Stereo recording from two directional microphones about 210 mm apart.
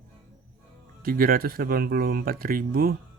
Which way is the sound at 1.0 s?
40° right (ahead or behind).